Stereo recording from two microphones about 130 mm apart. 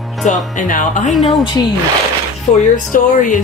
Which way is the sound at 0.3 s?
80° left.